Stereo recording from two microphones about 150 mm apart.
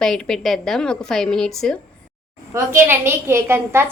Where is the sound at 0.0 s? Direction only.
5° left (ahead or behind).